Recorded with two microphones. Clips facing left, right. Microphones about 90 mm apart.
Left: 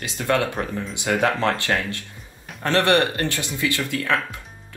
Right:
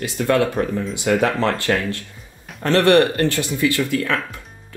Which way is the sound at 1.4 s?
20° left (ahead or behind).